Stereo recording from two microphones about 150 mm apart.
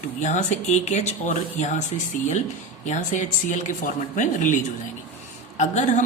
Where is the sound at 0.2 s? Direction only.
55° left (ahead or behind).